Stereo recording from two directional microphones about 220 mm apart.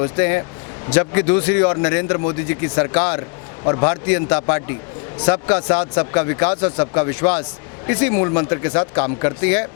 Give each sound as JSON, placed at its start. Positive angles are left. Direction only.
{"t": 0.0, "sound": "a man's voice", "side_deg": 15}